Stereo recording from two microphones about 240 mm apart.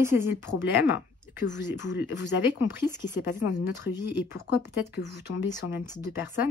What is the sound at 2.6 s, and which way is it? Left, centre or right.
Speech, centre.